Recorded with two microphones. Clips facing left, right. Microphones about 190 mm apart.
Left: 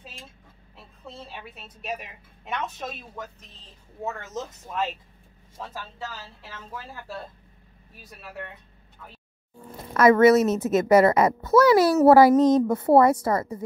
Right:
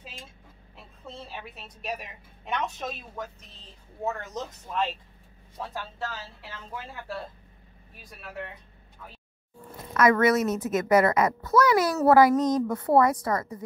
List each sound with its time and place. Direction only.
1.0 s a woman's voice: centre (ahead or behind)
6.5 s speech: centre (ahead or behind)
9.9 s a woman's voice: 30° left (ahead or behind)